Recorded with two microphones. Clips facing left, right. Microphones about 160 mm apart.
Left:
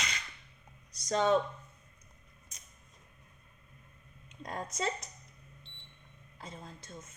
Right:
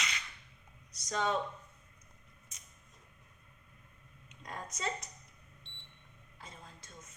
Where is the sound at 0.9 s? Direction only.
35° left (ahead or behind).